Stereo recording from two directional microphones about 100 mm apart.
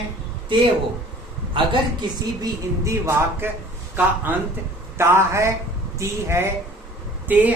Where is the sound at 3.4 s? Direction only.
25° right (ahead or behind).